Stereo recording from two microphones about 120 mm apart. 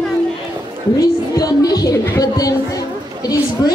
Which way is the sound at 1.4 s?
30° left (ahead or behind).